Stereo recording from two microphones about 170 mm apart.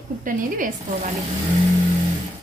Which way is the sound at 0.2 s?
50° right (ahead or behind).